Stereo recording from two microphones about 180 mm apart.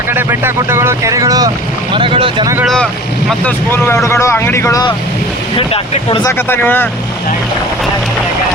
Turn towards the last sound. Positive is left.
turn(degrees=10)  # may be behind; listen again after turning